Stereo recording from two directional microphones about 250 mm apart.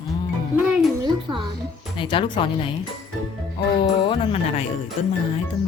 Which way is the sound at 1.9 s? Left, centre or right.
Left.